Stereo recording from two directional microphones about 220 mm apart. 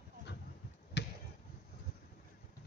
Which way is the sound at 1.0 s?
50° left (ahead or behind).